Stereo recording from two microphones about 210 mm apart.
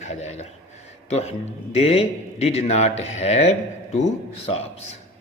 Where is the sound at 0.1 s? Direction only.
30° left (ahead or behind).